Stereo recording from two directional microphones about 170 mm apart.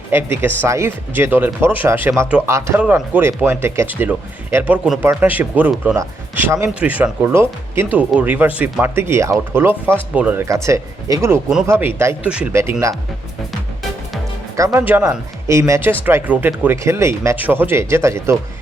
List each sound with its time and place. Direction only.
0.1 s speech: 10° right (ahead or behind)
14.5 s speech: 20° right (ahead or behind)